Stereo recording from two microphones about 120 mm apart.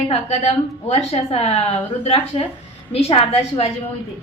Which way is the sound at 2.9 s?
55° left (ahead or behind).